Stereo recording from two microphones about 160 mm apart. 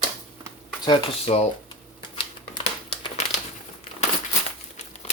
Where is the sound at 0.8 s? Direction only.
35° left (ahead or behind).